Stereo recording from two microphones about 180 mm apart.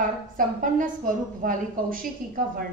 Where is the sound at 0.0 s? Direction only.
50° right (ahead or behind).